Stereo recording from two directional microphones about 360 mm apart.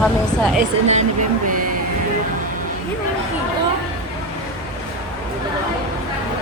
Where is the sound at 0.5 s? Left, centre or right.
Centre.